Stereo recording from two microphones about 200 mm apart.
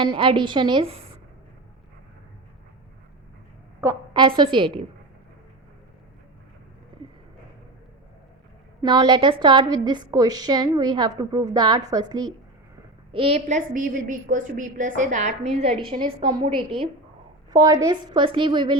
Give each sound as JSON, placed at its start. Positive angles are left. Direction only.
{"t": 0.0, "sound": "a woman's voice", "side_deg": -25}
{"t": 3.8, "sound": "a woman's voice", "side_deg": -20}
{"t": 6.9, "sound": "a sound", "side_deg": -25}
{"t": 8.8, "sound": "a woman's voice", "side_deg": -20}